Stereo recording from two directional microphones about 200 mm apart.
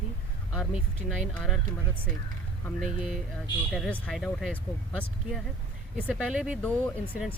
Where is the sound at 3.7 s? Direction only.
5° left (ahead or behind).